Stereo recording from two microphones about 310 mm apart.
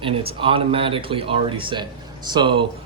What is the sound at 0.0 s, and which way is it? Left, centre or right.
Speech, centre.